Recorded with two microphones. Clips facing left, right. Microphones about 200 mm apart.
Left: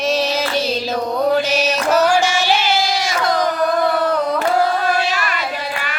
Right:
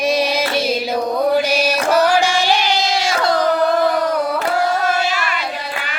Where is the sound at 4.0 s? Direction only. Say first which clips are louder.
Even; 10° right (ahead or behind).